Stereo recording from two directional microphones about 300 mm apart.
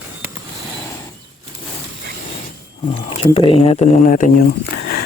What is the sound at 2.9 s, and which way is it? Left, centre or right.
Speech, centre.